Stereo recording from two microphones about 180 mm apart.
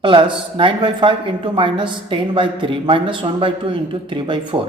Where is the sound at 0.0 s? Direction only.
30° right (ahead or behind).